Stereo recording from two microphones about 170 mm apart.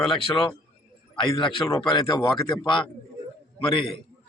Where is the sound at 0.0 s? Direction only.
30° left (ahead or behind).